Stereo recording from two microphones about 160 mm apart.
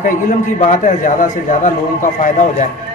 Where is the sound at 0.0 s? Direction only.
55° left (ahead or behind).